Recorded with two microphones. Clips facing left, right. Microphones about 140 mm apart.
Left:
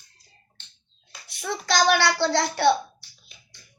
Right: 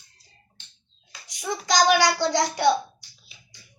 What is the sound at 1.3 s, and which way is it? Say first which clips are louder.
Child singing: right 1 dB; 15° right (ahead or behind).